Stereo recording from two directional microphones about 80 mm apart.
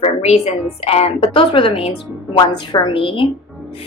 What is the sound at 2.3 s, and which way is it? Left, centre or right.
Speech, left.